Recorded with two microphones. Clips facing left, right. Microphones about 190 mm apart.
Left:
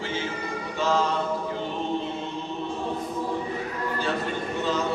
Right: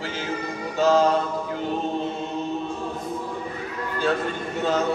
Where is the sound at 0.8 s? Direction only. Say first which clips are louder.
Right 6 dB; 40° right (ahead or behind).